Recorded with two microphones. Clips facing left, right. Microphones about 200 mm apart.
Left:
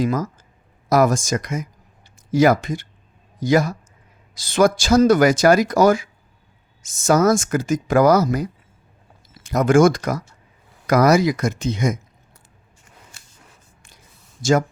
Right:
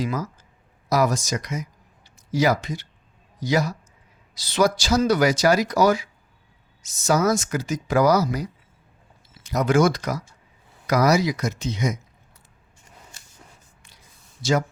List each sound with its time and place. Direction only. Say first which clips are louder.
0.0 s speech: left 6 dB; 45° left (ahead or behind)
14.4 s speech: left 5 dB; 45° left (ahead or behind)